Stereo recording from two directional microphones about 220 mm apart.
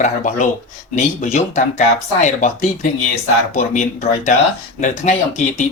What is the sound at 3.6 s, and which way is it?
Speech, 35° left (ahead or behind).